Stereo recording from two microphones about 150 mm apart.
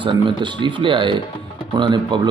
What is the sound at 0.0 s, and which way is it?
Speech, 30° right (ahead or behind).